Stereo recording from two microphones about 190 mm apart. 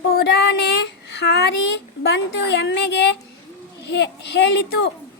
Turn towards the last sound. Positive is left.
turn(degrees=65)  # may be behind; listen again after turning